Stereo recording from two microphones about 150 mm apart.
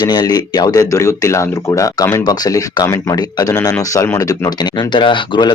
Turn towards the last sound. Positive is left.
turn(degrees=30)  # may be behind; listen again after turning